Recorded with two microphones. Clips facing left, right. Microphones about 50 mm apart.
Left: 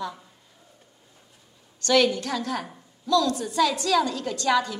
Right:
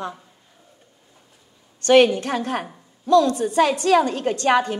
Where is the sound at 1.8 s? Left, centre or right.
Right.